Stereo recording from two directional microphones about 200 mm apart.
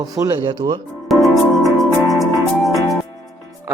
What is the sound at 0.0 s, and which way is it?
Speech, 15° right (ahead or behind).